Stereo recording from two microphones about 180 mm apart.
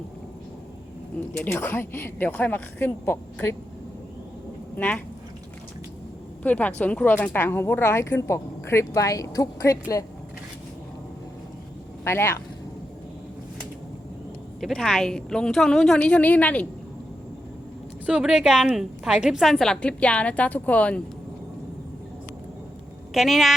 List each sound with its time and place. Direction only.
1.3 s a woman's voice: 10° left (ahead or behind)
4.8 s a woman's voice: 10° left (ahead or behind)
6.4 s a woman's voice: 10° left (ahead or behind)
12.0 s a woman's voice: 15° left (ahead or behind)
14.6 s a woman's voice: 5° left (ahead or behind)
18.0 s a woman's voice: 5° right (ahead or behind)
23.1 s a woman's voice: centre (ahead or behind)